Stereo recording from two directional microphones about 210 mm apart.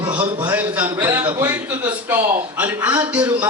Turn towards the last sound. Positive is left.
turn(degrees=-5)  # may be behind; listen again after turning